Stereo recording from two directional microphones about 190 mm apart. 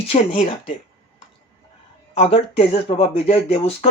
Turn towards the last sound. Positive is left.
turn(degrees=30)  # may be behind; listen again after turning